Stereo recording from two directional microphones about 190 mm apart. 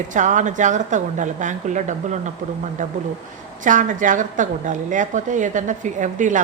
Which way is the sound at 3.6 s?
40° right (ahead or behind).